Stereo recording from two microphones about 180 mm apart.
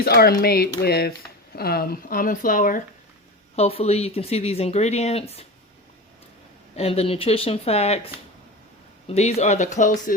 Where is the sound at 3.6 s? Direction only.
35° left (ahead or behind).